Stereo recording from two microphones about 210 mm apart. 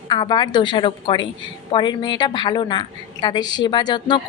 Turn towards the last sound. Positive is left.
turn(degrees=20)  # may be behind; listen again after turning